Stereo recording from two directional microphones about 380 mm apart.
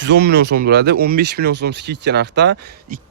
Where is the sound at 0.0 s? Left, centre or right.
Right.